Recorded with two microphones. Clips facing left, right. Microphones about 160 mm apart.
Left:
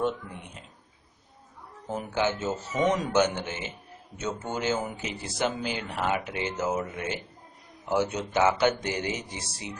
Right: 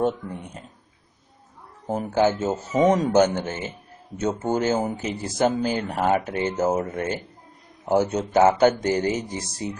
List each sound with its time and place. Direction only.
0.0 s speech: 45° right (ahead or behind)
1.9 s speech: 40° right (ahead or behind)